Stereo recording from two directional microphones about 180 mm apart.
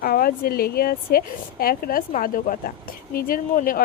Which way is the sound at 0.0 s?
55° left (ahead or behind).